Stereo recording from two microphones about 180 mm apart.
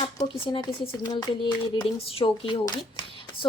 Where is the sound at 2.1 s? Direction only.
30° left (ahead or behind).